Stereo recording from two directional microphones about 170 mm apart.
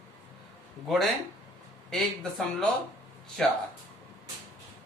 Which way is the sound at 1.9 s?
5° left (ahead or behind).